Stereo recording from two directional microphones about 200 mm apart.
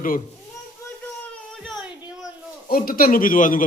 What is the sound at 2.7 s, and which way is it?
Speech, 45° left (ahead or behind).